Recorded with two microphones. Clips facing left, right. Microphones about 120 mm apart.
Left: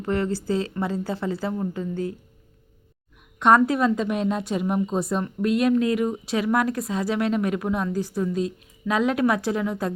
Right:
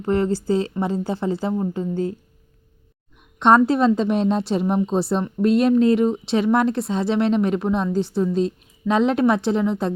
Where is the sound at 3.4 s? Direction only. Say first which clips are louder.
Right 3 dB; 25° right (ahead or behind).